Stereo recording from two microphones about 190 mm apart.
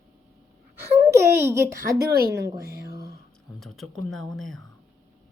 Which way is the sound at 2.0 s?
55° right (ahead or behind).